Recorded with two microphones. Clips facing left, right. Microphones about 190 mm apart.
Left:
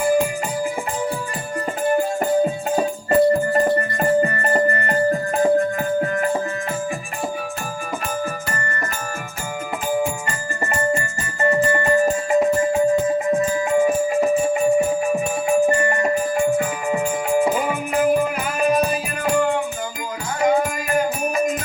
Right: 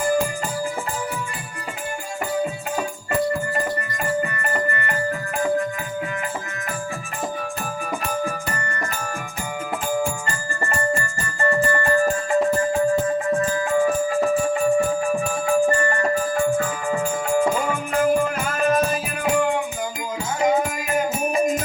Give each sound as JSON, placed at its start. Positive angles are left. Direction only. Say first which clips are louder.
{"t": 1.9, "sound": "music", "louder": "left 9 dB", "side_deg": 50}
{"t": 8.2, "sound": "music", "louder": "even", "side_deg": 5}
{"t": 9.9, "sound": "music", "louder": "left 3 dB", "side_deg": 20}
{"t": 17.4, "sound": "music", "louder": "left 1 dB", "side_deg": 10}
{"t": 19.2, "sound": "music", "louder": "left 1 dB", "side_deg": -15}